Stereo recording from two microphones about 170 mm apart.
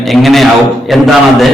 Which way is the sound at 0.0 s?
Centre (ahead or behind).